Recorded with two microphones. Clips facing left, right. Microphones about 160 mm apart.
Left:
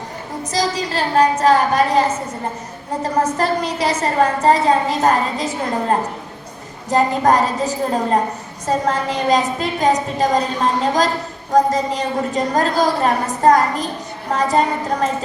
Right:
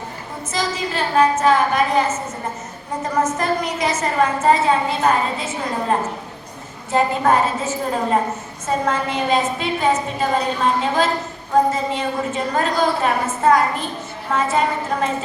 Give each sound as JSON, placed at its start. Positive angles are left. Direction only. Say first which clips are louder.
{"t": 0.5, "sound": "a woman's voice", "louder": "left 3 dB", "side_deg": 35}
{"t": 6.9, "sound": "a woman's voice", "louder": "left 2 dB", "side_deg": 40}